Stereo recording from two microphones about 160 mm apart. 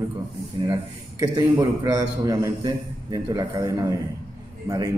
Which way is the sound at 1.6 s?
20° right (ahead or behind).